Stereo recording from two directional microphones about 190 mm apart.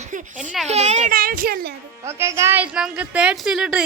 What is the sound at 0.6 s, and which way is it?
A child's voice, 35° right (ahead or behind).